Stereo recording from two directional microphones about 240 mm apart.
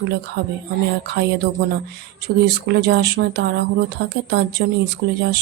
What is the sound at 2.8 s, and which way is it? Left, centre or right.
Speech, right.